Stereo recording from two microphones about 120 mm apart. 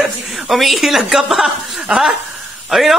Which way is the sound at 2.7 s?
Centre (ahead or behind).